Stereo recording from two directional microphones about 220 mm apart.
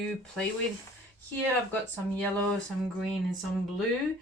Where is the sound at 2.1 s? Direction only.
5° left (ahead or behind).